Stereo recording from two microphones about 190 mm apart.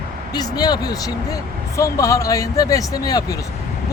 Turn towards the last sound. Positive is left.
turn(degrees=20)  # may be behind; listen again after turning